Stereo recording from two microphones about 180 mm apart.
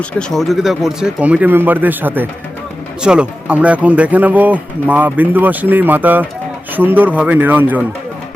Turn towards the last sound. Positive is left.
turn(degrees=-10)  # may be behind; listen again after turning